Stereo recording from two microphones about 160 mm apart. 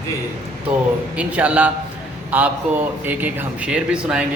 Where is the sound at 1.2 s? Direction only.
10° right (ahead or behind).